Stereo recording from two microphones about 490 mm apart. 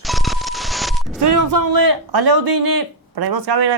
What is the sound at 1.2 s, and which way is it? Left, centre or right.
Speech, right.